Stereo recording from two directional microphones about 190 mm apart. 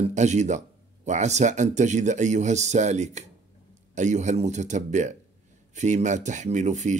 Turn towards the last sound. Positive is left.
turn(degrees=-40)  # may be behind; listen again after turning